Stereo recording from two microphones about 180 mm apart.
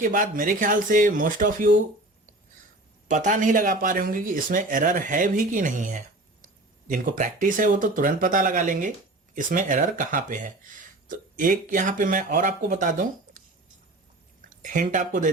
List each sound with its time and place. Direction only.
0.0 s speech: 50° right (ahead or behind)
3.1 s speech: 45° right (ahead or behind)
11.1 s a sound: 45° right (ahead or behind)
11.7 s speech: 45° right (ahead or behind)
14.6 s speech: 45° right (ahead or behind)